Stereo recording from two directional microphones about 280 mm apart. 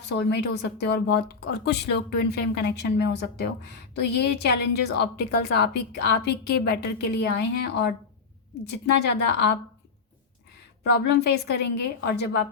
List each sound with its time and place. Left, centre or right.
0.0 s a woman's voice: left
11.0 s a woman's voice: left